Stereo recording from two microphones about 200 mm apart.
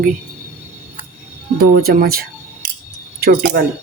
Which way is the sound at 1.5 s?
45° right (ahead or behind).